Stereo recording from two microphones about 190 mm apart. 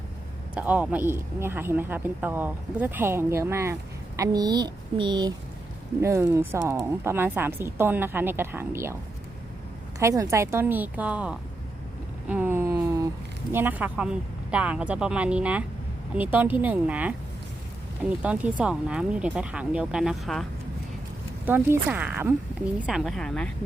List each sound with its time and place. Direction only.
0.5 s speech: 5° right (ahead or behind)
10.0 s speech: 15° right (ahead or behind)
12.3 s a sound: 10° right (ahead or behind)
13.5 s speech: 10° right (ahead or behind)
18.2 s speech: 5° right (ahead or behind)
21.4 s speech: 10° right (ahead or behind)